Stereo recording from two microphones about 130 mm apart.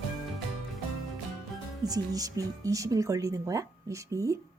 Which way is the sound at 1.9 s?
30° right (ahead or behind).